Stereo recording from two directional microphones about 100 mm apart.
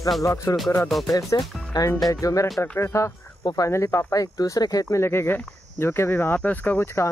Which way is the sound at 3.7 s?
25° left (ahead or behind).